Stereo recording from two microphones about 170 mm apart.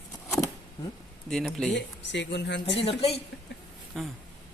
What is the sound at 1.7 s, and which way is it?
Speech, 90° left.